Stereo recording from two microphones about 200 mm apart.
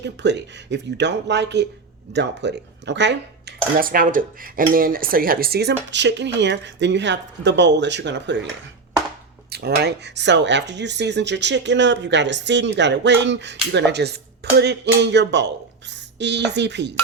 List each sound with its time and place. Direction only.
0.0 s speech: 60° right (ahead or behind)
9.5 s speech: 55° right (ahead or behind)